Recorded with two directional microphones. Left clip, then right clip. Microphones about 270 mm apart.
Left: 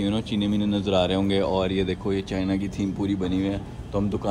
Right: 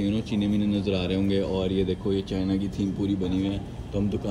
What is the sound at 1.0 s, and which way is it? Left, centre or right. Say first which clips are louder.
Speech: left 3 dB; right.